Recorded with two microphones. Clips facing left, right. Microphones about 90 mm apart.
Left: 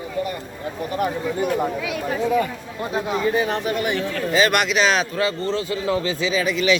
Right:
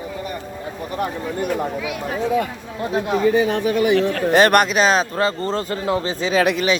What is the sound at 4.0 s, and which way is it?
Speech, 90° right.